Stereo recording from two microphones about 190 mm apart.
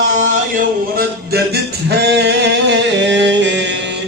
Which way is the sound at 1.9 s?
60° right (ahead or behind).